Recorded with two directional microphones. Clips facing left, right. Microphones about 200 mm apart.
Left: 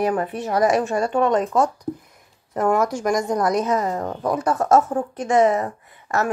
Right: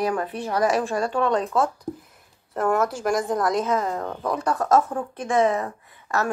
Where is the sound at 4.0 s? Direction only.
15° left (ahead or behind).